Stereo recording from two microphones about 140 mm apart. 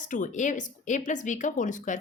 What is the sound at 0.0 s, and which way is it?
A woman's voice, 65° left (ahead or behind).